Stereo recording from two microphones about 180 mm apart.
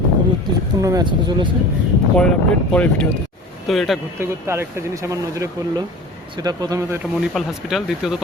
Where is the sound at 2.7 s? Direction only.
5° left (ahead or behind).